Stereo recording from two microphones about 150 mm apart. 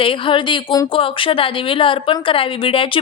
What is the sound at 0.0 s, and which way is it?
Speech, 35° left (ahead or behind).